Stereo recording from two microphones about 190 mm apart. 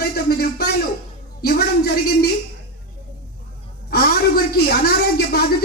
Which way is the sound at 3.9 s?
55° left (ahead or behind).